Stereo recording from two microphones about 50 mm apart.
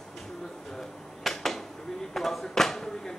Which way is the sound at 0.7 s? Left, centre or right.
Centre.